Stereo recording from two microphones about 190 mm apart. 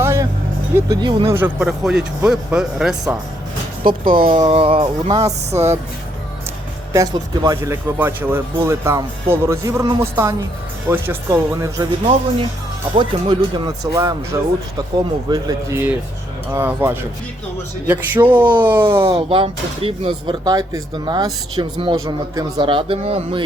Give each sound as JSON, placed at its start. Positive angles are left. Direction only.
{"t": 0.0, "sound": "vehicle", "side_deg": -15}
{"t": 0.8, "sound": "speech", "side_deg": -20}
{"t": 1.4, "sound": "speech", "side_deg": -10}
{"t": 3.8, "sound": "speech", "side_deg": -50}
{"t": 6.9, "sound": "speech", "side_deg": -20}
{"t": 19.3, "sound": "speech", "side_deg": -30}